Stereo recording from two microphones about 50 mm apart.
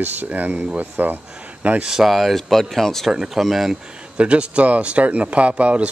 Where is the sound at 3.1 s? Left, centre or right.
Centre.